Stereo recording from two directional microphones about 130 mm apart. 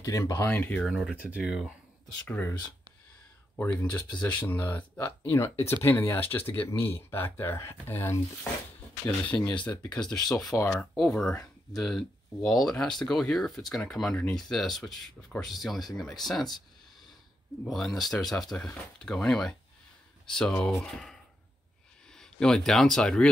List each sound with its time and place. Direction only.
0.0 s speech: 25° left (ahead or behind)
0.8 s speech: centre (ahead or behind)
2.2 s speech: 15° left (ahead or behind)
4.2 s speech: 10° left (ahead or behind)
17.6 s speech: centre (ahead or behind)